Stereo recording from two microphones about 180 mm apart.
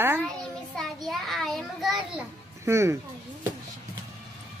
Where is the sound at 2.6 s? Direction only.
15° right (ahead or behind).